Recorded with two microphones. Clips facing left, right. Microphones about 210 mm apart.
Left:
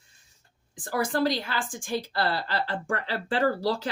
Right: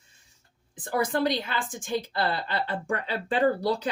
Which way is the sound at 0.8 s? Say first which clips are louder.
Even; 20° right (ahead or behind).